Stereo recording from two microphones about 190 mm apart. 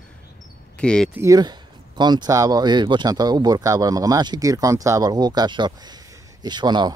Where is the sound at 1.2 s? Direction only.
20° right (ahead or behind).